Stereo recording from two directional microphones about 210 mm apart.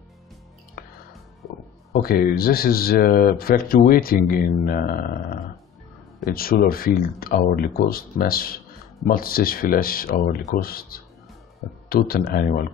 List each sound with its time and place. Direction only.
0.8 s music: 45° left (ahead or behind)
1.9 s speech: 45° left (ahead or behind)
12.3 s speech: 45° left (ahead or behind)